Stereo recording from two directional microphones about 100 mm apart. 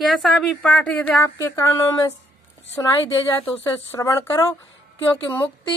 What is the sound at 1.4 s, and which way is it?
Speech, 25° left (ahead or behind).